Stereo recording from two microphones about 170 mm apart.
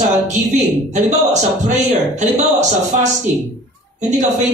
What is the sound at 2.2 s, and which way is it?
Speech, 45° right (ahead or behind).